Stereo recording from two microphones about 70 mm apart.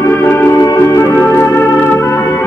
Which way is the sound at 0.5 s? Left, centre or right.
Left.